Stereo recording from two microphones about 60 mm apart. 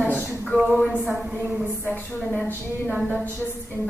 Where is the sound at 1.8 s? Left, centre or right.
Left.